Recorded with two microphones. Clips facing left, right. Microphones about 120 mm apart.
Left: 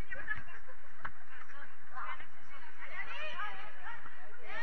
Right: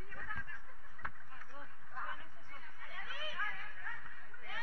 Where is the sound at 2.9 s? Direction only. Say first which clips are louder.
Even; 10° right (ahead or behind).